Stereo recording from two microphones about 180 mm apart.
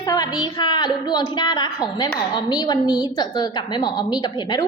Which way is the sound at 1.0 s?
25° left (ahead or behind).